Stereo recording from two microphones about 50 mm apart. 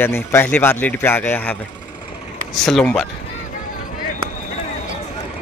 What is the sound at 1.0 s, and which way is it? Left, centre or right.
Speech, left.